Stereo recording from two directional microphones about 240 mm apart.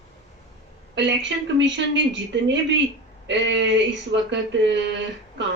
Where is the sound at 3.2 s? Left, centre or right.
Right.